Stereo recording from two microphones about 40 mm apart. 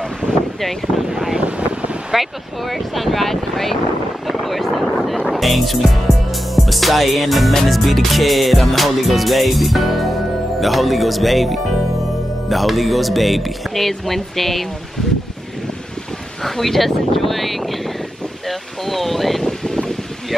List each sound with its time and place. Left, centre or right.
0.6 s speech: centre
1.4 s wind noise: right
2.1 s music: centre
4.3 s speech: centre
7.5 s music: centre
16.4 s a sound: centre
19.4 s wind: centre